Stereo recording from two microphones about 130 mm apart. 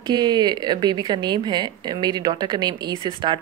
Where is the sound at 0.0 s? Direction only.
35° right (ahead or behind).